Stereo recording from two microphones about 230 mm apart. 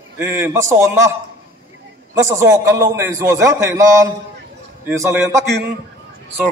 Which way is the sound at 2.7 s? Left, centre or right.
Centre.